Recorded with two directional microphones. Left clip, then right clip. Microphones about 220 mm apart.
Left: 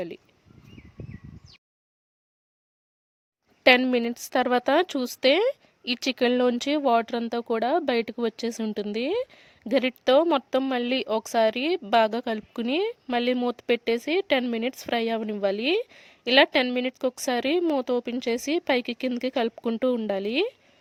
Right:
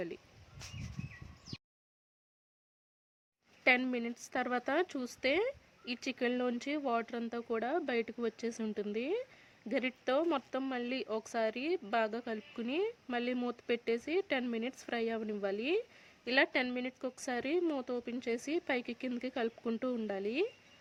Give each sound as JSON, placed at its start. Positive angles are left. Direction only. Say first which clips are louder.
{"t": 3.6, "sound": "a woman's voice", "louder": "left 12 dB", "side_deg": 40}